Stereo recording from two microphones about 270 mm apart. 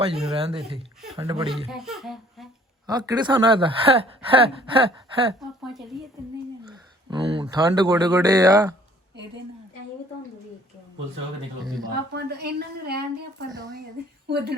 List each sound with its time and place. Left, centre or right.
0.2 s speech: right
1.5 s speech: centre
2.8 s speech: centre
5.6 s speech: centre
7.1 s speech: centre
11.8 s a woman's voice: right
14.3 s a woman's voice: right